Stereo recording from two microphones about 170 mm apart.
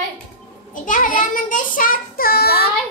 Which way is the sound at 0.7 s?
50° left (ahead or behind).